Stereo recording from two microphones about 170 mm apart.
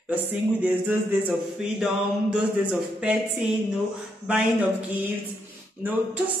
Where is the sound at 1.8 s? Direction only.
5° right (ahead or behind).